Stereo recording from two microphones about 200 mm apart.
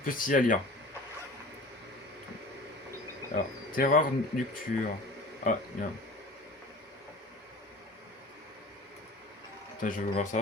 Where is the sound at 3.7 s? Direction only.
40° left (ahead or behind).